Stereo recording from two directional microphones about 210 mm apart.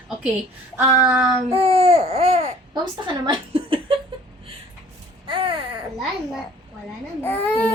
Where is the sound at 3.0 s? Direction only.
25° right (ahead or behind).